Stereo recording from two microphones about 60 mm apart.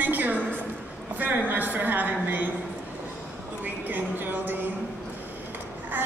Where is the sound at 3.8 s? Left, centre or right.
Right.